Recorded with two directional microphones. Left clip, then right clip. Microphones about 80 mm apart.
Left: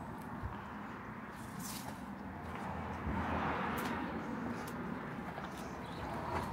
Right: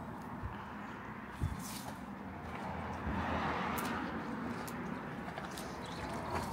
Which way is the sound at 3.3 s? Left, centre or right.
Right.